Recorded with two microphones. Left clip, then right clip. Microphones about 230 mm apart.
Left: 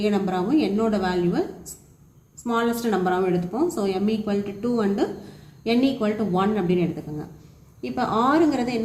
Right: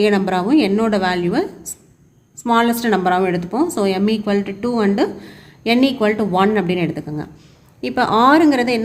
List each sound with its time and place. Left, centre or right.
0.0 s speech: right